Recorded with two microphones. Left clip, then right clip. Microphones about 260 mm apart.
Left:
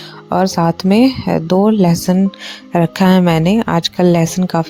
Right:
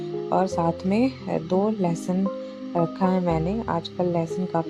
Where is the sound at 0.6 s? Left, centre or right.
Left.